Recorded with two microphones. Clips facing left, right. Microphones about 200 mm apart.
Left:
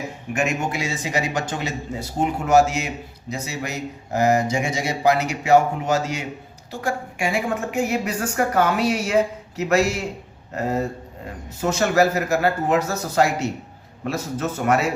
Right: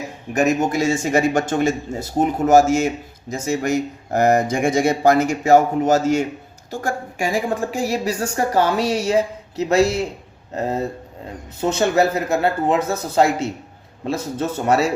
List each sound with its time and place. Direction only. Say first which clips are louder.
0.3 s a woman's voice: right 7 dB; 45° right (ahead or behind)